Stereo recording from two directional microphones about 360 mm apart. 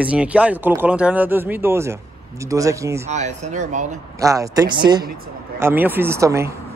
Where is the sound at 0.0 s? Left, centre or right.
Centre.